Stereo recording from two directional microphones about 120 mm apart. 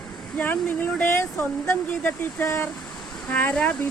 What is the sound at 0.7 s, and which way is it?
Speech, 20° left (ahead or behind).